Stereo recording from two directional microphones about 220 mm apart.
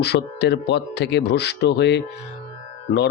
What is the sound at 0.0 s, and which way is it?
Speech, 50° left (ahead or behind).